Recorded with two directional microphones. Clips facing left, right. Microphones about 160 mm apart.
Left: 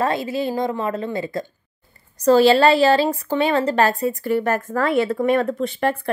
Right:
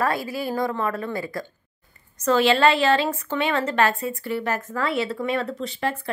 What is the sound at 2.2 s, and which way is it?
A woman's voice, 35° left (ahead or behind).